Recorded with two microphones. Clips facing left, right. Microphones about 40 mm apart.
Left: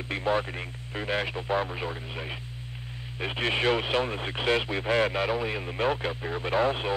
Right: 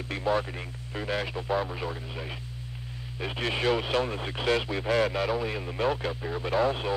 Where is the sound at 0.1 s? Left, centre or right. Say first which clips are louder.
Left 1 dB; left.